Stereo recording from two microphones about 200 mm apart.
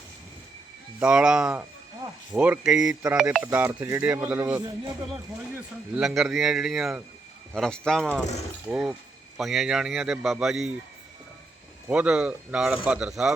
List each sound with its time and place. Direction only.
0.9 s speech: 5° right (ahead or behind)
2.9 s speech: 15° right (ahead or behind)
3.2 s speech: 5° right (ahead or behind)
11.9 s speech: 5° right (ahead or behind)